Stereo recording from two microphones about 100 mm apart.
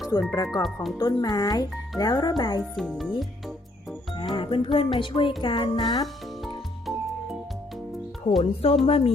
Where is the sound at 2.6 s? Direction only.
Centre (ahead or behind).